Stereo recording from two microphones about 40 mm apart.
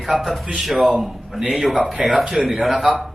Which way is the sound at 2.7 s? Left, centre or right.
Centre.